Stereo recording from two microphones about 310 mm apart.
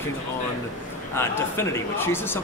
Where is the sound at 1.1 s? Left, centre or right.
Centre.